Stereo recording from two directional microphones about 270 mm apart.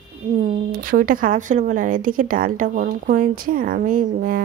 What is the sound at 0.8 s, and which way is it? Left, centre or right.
Speech, right.